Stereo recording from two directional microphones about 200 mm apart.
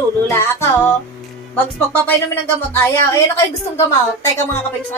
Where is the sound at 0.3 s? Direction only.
15° left (ahead or behind).